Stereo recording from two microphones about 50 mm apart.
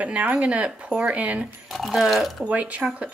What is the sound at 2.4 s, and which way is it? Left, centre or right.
Speech, right.